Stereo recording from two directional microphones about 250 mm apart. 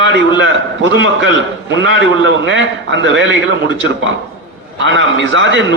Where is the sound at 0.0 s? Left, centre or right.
Right.